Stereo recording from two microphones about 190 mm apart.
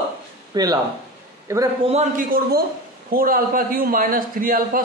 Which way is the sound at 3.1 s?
50° right (ahead or behind).